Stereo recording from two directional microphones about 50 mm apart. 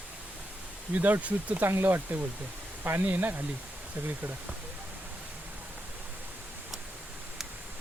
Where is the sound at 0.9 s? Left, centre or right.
Right.